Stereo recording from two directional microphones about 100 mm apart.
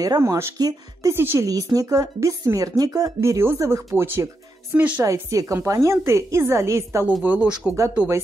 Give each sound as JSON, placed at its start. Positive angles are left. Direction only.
{"t": 0.0, "sound": "a woman's voice", "side_deg": -35}
{"t": 0.6, "sound": "speech", "side_deg": -40}
{"t": 1.1, "sound": "a woman's voice", "side_deg": -25}
{"t": 1.5, "sound": "speech", "side_deg": -35}
{"t": 3.2, "sound": "a woman's voice", "side_deg": -25}
{"t": 5.0, "sound": "a woman's voice", "side_deg": -35}
{"t": 7.2, "sound": "speech", "side_deg": -10}